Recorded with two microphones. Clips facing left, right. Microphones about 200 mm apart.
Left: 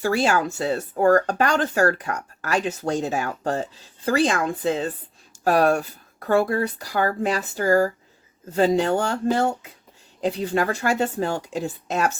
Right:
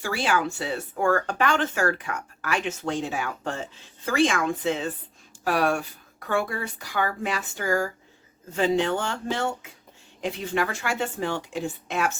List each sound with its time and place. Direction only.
0.0 s speech: 40° left (ahead or behind)